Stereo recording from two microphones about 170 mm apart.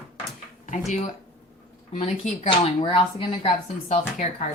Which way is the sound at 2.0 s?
35° left (ahead or behind).